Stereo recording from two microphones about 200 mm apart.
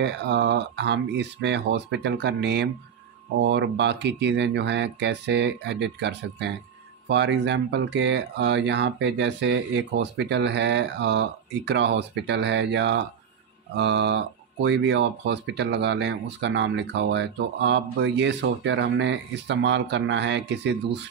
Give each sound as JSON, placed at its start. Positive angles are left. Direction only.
{"t": 0.0, "sound": "speech", "side_deg": -55}